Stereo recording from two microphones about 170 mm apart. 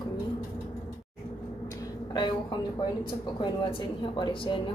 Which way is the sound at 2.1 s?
25° left (ahead or behind).